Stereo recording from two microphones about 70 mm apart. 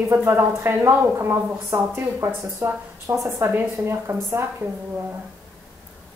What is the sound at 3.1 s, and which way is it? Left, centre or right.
Speech, right.